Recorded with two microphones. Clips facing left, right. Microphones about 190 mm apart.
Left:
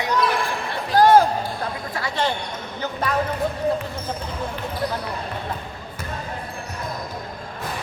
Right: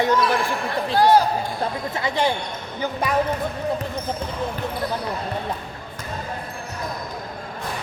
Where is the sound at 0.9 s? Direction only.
50° left (ahead or behind).